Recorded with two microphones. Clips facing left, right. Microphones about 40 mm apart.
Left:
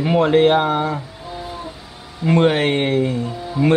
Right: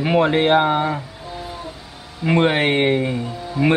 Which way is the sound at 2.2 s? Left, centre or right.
Centre.